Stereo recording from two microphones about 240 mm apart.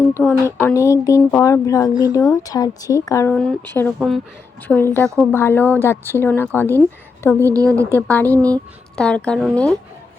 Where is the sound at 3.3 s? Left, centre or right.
Centre.